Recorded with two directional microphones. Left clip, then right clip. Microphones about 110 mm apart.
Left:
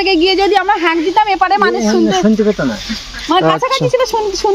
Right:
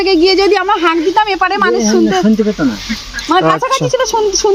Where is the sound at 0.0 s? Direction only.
5° left (ahead or behind).